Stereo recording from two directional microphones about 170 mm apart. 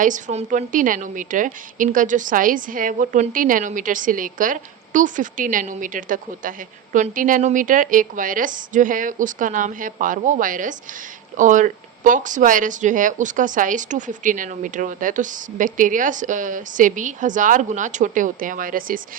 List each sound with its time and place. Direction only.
0.0 s speech: 45° right (ahead or behind)